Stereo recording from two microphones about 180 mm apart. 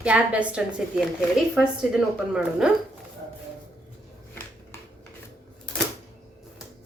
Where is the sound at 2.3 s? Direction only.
5° right (ahead or behind).